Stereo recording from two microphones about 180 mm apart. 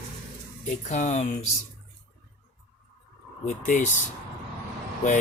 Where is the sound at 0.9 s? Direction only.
40° left (ahead or behind).